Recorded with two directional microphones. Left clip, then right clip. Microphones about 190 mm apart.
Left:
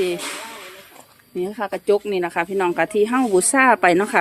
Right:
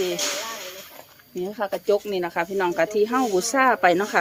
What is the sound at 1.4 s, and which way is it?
Speech, 30° left (ahead or behind).